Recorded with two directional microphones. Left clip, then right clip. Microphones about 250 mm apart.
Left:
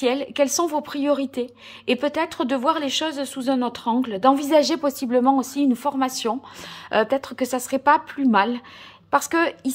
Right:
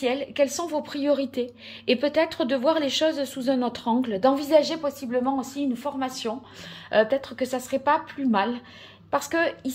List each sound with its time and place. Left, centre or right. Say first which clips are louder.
0.0 s a woman's voice: left 3 dB; centre